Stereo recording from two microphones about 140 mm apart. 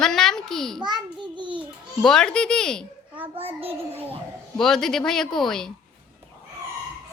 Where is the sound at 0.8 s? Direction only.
35° right (ahead or behind).